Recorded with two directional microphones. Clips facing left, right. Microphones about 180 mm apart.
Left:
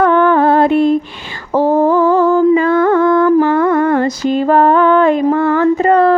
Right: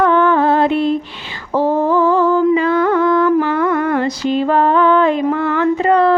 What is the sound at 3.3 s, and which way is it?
Music, 45° left (ahead or behind).